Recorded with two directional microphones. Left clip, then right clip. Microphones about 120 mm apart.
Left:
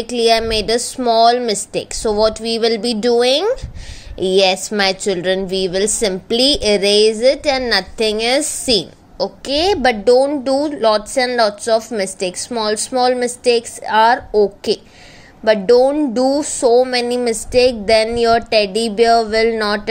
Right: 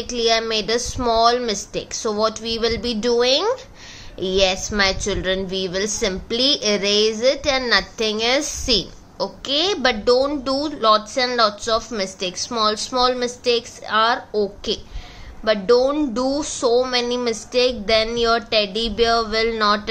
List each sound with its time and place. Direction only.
0.1 s a woman's voice: 45° left (ahead or behind)